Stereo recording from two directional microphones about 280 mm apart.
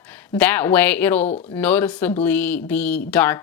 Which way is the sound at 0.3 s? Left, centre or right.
Centre.